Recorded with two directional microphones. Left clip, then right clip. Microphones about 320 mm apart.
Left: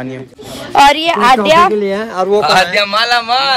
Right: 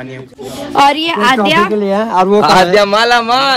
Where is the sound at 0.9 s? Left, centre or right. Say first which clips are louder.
Left 2 dB; left.